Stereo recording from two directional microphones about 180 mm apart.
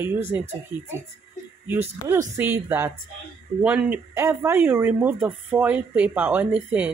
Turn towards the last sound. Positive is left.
turn(degrees=-10)  # may be behind; listen again after turning